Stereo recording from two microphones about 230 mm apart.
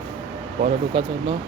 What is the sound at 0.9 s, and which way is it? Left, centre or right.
Speech, right.